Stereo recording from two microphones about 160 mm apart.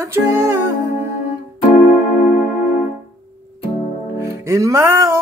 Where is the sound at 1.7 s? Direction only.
55° left (ahead or behind).